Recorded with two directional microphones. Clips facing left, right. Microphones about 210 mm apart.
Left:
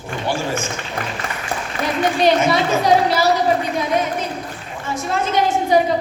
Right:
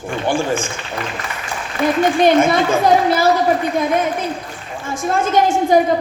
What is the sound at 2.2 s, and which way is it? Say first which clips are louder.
A woman's voice: right 2 dB; 50° right (ahead or behind).